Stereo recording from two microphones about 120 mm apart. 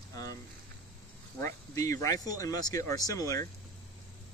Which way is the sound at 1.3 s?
25° left (ahead or behind).